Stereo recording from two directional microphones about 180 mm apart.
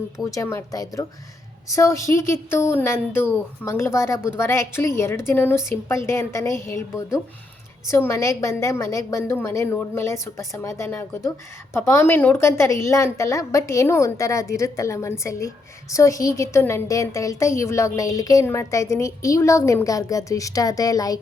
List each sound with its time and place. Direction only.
0.2 s a woman's voice: 20° left (ahead or behind)